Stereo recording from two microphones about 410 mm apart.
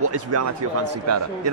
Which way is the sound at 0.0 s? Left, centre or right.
Right.